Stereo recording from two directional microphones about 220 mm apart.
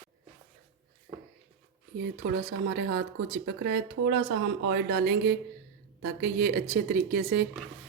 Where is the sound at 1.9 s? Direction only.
40° right (ahead or behind).